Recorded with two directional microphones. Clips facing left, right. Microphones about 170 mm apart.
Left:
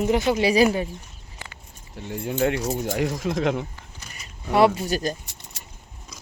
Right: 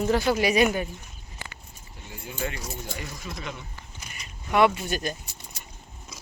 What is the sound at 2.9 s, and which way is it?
Speech, 90° left.